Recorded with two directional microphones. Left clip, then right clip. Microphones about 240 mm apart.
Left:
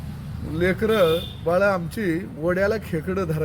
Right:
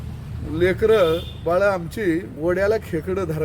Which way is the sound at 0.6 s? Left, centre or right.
Centre.